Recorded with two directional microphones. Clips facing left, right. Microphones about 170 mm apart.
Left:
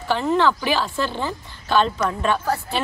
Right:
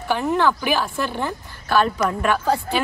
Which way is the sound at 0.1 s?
10° right (ahead or behind).